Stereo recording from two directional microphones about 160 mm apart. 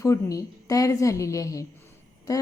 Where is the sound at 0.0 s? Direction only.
20° left (ahead or behind).